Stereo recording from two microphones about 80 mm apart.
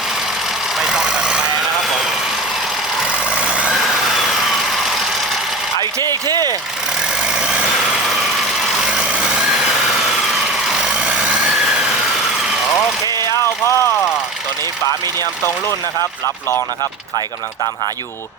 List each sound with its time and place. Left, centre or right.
0.8 s vehicle: centre
3.1 s vehicle: centre
3.8 s vehicle: centre
6.0 s a sound: right
7.3 s vehicle: centre
8.8 s vehicle: centre
13.3 s vehicle: left